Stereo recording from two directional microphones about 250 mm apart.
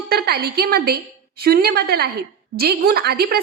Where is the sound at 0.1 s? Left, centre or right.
Right.